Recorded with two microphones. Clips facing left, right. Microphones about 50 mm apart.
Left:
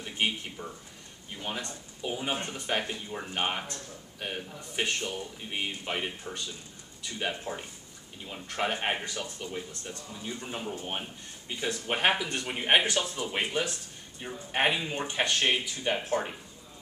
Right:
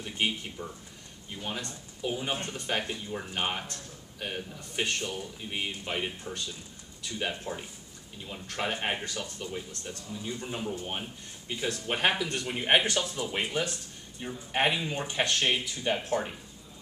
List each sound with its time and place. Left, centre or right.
0.0 s speech: centre